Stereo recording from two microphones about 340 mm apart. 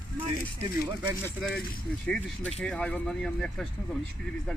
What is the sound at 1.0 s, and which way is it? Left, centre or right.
Speech, centre.